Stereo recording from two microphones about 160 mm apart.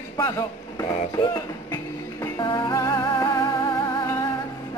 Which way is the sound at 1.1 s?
25° left (ahead or behind).